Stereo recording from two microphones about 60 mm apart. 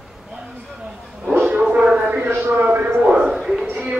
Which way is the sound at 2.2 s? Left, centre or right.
Right.